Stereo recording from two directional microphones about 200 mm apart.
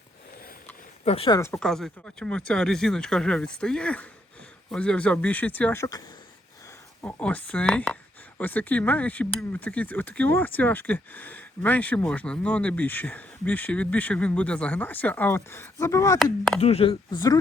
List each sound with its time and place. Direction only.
1.0 s speech: 30° left (ahead or behind)
1.4 s speech: 10° left (ahead or behind)
16.1 s speech: centre (ahead or behind)
16.6 s speech: 30° left (ahead or behind)